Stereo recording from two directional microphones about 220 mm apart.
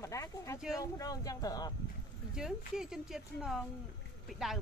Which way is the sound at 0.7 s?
15° left (ahead or behind).